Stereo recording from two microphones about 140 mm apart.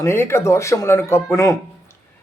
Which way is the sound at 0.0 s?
20° left (ahead or behind).